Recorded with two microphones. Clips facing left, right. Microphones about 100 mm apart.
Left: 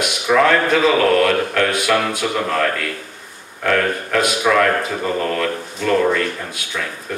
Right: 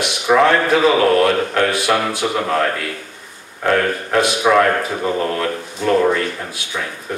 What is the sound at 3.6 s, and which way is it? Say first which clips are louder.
A man's voice: right 1 dB; 25° right (ahead or behind).